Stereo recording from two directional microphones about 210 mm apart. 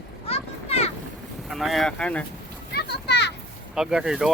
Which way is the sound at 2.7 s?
50° left (ahead or behind).